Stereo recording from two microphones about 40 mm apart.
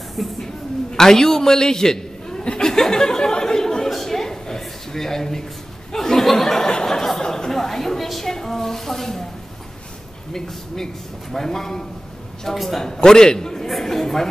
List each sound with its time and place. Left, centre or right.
0.2 s speech: centre
0.9 s a man's voice: centre
2.6 s a sound: centre
11.3 s a man's voice: centre
12.8 s a man's voice: centre
13.7 s chatter: centre